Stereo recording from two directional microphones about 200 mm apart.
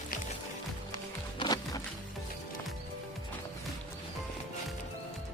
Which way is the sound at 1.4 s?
20° left (ahead or behind).